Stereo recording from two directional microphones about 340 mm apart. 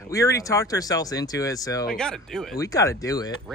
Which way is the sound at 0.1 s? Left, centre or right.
Centre.